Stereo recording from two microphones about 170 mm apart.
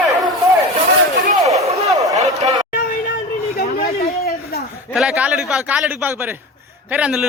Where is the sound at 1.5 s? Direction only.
40° right (ahead or behind).